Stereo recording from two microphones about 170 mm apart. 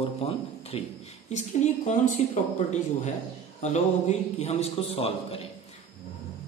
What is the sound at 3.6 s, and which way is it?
A man's voice, 40° left (ahead or behind).